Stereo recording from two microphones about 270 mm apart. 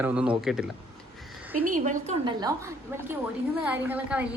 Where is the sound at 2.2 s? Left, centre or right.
Centre.